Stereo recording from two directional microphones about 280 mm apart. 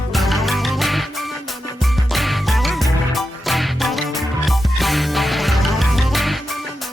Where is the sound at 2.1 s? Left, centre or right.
Centre.